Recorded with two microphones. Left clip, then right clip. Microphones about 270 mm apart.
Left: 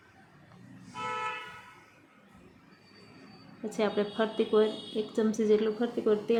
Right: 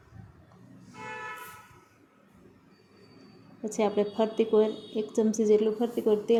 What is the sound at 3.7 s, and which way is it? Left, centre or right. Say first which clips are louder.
A woman's voice: right 3 dB; centre.